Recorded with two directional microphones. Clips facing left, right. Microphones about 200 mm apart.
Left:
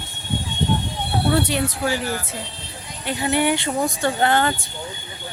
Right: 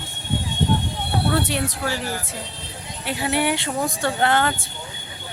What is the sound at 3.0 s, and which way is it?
Speech, 5° right (ahead or behind).